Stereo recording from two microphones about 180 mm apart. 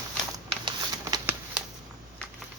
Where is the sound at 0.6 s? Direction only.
25° right (ahead or behind).